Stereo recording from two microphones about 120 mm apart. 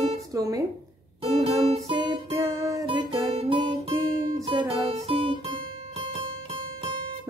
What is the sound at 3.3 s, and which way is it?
Guitar, 55° right (ahead or behind).